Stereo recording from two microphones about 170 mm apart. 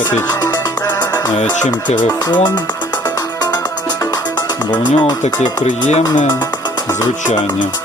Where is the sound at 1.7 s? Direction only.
25° left (ahead or behind).